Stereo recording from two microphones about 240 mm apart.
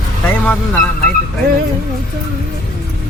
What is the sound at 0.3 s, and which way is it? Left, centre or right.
Speech, centre.